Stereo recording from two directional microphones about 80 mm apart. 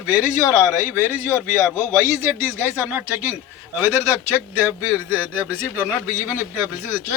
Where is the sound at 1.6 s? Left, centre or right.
Left.